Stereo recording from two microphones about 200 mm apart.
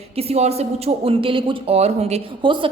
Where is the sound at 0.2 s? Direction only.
30° right (ahead or behind).